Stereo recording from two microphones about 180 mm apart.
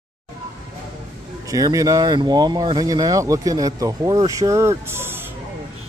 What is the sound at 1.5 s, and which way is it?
Speech, 20° right (ahead or behind).